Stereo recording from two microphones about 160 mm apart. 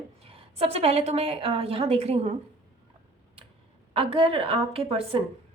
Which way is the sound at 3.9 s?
35° right (ahead or behind).